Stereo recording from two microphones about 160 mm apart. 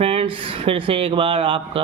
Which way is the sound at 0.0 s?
35° right (ahead or behind).